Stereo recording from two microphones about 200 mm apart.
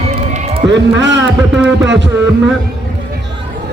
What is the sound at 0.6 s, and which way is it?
Speech, 60° right (ahead or behind).